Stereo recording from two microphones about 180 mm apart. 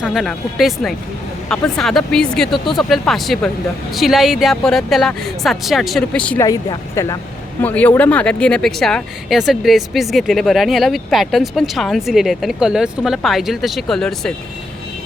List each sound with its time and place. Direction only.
0.0 s speech: centre (ahead or behind)
6.4 s speech: 20° left (ahead or behind)
7.6 s speech: 10° left (ahead or behind)